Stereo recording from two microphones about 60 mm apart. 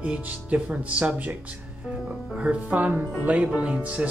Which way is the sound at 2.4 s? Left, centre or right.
Right.